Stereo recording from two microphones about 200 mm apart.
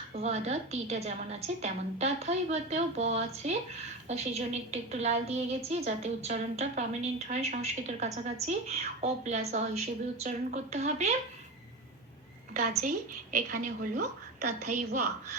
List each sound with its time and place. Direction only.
0.1 s a woman's voice: 30° right (ahead or behind)
13.3 s a woman's voice: 40° right (ahead or behind)